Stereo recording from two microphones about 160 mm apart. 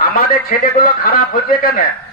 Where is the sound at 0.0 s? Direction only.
65° left (ahead or behind).